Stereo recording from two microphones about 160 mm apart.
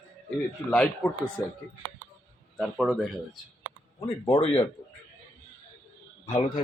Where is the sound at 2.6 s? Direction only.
Centre (ahead or behind).